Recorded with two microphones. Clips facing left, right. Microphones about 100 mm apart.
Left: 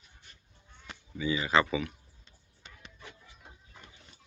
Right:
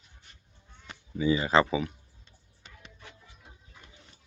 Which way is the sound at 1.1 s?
35° right (ahead or behind).